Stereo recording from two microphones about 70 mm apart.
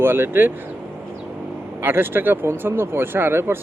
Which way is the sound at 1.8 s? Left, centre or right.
Right.